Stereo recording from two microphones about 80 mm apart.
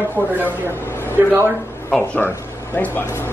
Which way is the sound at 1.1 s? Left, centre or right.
Right.